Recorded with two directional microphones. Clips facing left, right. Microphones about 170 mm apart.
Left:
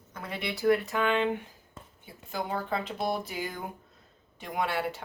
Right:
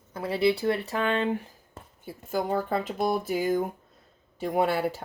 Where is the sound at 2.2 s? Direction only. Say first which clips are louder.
Right 6 dB; 45° right (ahead or behind).